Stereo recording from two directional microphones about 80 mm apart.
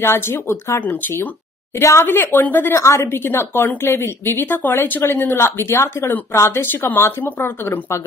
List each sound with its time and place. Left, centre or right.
0.0 s a woman's voice: left
1.8 s a woman's voice: left